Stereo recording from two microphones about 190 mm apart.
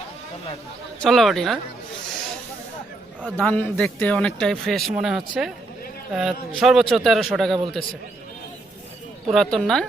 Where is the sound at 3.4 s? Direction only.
5° left (ahead or behind).